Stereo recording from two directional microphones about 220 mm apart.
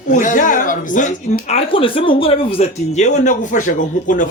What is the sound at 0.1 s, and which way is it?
A woman's voice, 35° left (ahead or behind).